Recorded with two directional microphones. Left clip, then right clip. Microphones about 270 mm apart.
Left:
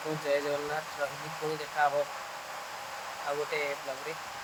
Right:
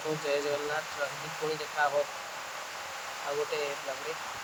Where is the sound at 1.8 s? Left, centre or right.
Centre.